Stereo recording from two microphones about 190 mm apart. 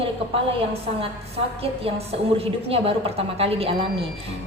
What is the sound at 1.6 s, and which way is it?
A woman's voice, 30° right (ahead or behind).